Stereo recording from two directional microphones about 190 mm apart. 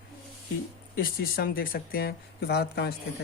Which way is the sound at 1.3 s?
50° left (ahead or behind).